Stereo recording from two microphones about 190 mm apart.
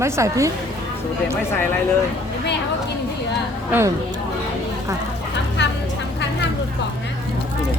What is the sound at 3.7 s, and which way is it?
Speech, 15° right (ahead or behind).